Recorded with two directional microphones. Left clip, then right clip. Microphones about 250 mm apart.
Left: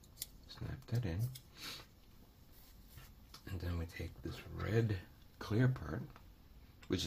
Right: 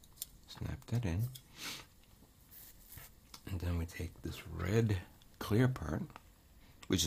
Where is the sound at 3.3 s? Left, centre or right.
Right.